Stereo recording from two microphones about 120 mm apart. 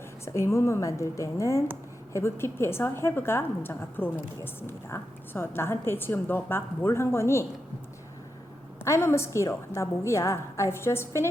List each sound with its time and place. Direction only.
0.3 s a woman's voice: 25° left (ahead or behind)
8.8 s a woman's voice: 20° left (ahead or behind)